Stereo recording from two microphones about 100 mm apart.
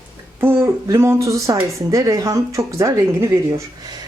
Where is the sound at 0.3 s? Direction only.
25° right (ahead or behind).